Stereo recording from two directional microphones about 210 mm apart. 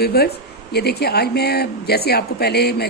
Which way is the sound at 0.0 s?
50° left (ahead or behind).